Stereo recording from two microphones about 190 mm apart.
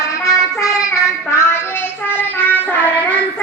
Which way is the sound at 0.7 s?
5° right (ahead or behind).